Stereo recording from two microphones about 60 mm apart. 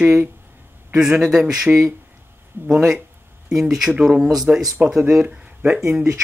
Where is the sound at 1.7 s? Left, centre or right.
Centre.